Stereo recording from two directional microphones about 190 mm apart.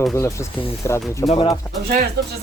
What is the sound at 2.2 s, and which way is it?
Speech, 60° right (ahead or behind).